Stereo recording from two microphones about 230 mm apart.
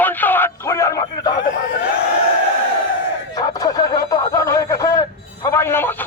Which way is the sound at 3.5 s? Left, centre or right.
Centre.